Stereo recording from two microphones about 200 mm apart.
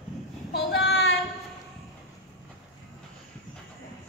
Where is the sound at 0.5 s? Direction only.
55° left (ahead or behind).